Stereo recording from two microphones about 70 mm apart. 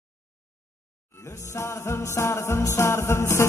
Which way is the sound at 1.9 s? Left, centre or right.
Left.